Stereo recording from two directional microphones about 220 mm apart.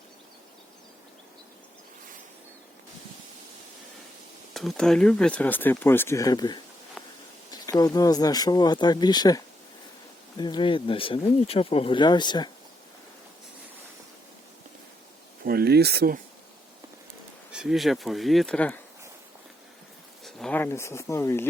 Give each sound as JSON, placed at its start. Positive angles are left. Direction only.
{"t": 4.5, "sound": "speech", "side_deg": 0}
{"t": 7.0, "sound": "a sound", "side_deg": 0}
{"t": 7.5, "sound": "speech", "side_deg": 15}
{"t": 15.4, "sound": "speech", "side_deg": -45}
{"t": 17.5, "sound": "speech", "side_deg": -5}
{"t": 20.2, "sound": "speech", "side_deg": 5}